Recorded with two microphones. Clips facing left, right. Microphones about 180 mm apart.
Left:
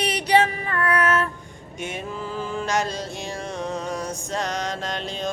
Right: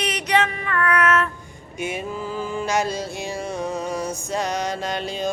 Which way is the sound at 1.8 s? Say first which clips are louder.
Right 3 dB; 5° right (ahead or behind).